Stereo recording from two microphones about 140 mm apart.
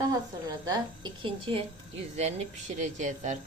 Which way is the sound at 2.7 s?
60° right (ahead or behind).